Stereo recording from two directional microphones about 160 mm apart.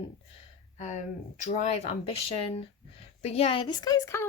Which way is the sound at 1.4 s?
45° left (ahead or behind).